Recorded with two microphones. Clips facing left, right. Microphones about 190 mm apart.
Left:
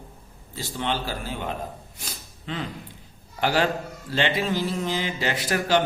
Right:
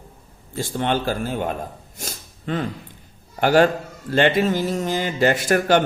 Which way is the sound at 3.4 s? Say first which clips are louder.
Right 7 dB; 50° right (ahead or behind).